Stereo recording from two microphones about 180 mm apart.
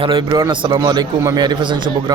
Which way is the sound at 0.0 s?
25° right (ahead or behind).